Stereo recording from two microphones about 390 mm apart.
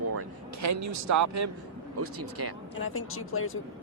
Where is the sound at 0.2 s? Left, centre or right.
Right.